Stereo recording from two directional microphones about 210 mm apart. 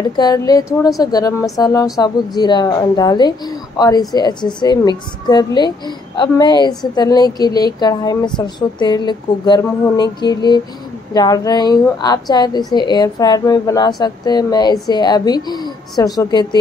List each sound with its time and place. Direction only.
0.2 s a woman's voice: 20° left (ahead or behind)